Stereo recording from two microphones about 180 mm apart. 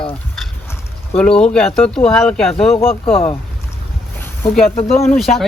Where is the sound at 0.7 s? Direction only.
5° left (ahead or behind).